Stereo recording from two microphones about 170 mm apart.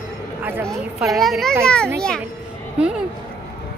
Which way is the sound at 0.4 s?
10° right (ahead or behind).